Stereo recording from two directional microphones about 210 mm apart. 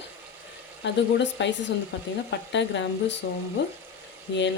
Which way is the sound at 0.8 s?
55° left (ahead or behind).